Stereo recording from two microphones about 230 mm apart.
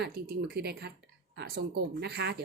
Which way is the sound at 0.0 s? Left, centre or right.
Right.